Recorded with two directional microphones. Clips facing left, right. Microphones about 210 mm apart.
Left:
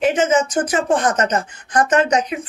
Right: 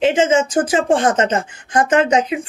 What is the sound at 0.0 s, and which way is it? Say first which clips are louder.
Speech: right 2 dB; 25° right (ahead or behind).